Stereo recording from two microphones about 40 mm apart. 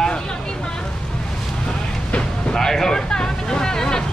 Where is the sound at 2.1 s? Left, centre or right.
Centre.